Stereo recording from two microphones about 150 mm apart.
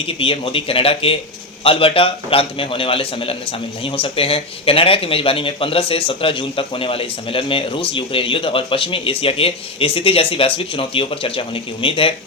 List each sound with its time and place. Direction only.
0.2 s a man's voice: 35° left (ahead or behind)